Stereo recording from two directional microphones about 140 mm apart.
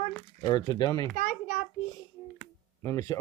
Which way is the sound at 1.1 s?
60° left (ahead or behind).